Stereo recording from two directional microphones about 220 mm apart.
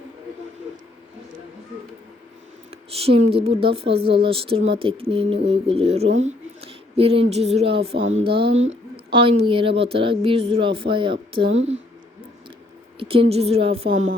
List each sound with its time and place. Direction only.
2.9 s a woman's voice: 25° right (ahead or behind)
8.5 s speech: 60° right (ahead or behind)
9.1 s a woman's voice: 25° right (ahead or behind)
13.0 s a woman's voice: 25° right (ahead or behind)